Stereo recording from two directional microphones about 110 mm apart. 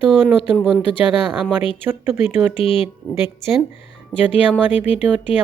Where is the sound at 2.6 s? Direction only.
60° left (ahead or behind).